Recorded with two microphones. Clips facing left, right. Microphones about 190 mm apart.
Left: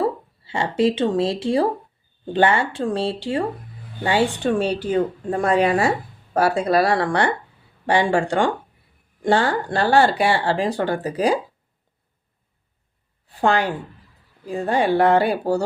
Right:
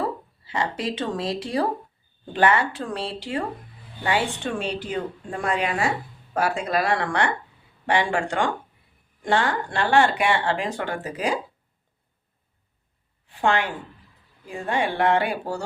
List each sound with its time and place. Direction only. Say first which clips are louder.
0.0 s speech: left 5 dB; 30° left (ahead or behind)
13.2 s a woman's voice: left 3 dB; 40° left (ahead or behind)